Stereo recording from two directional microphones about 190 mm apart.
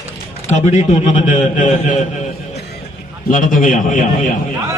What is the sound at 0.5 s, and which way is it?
A man's voice, 35° left (ahead or behind).